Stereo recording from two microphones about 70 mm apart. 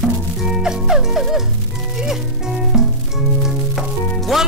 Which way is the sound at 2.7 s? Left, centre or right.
Centre.